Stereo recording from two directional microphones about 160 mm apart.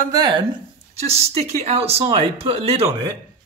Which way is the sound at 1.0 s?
40° right (ahead or behind).